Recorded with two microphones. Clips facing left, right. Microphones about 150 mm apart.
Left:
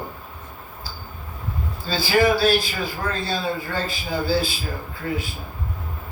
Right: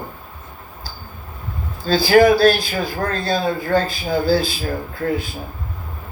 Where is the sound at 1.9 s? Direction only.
45° right (ahead or behind).